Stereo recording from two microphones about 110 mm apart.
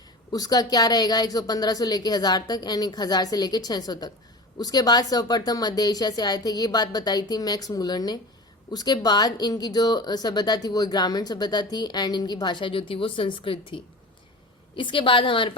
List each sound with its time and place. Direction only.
0.3 s a woman's voice: 35° left (ahead or behind)